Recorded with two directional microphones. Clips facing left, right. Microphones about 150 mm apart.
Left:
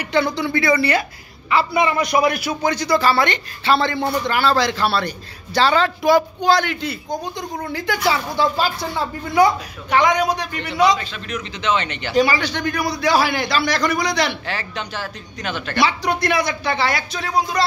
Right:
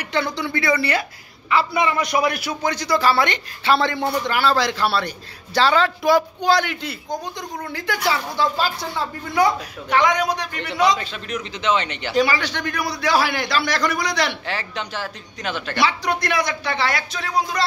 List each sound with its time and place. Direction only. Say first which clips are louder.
0.1 s a man's voice: left 4 dB; 10° left (ahead or behind)
1.5 s a woman's voice: left 2 dB; 10° left (ahead or behind)
7.7 s a woman's voice: left 2 dB; 15° left (ahead or behind)
11.3 s speech: even; 30° right (ahead or behind)
12.4 s a man's voice: left 3 dB; 35° left (ahead or behind)
12.6 s a man's voice: left 5 dB; centre (ahead or behind)
14.8 s speech: even; 25° right (ahead or behind)
15.7 s a man's voice: left 2 dB; centre (ahead or behind)
16.1 s speech: left 2 dB; 30° left (ahead or behind)